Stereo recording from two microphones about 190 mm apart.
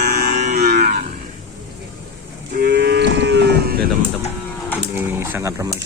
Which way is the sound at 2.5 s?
55° right (ahead or behind).